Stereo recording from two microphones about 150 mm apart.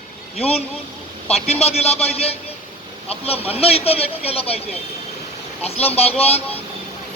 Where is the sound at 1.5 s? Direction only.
45° left (ahead or behind).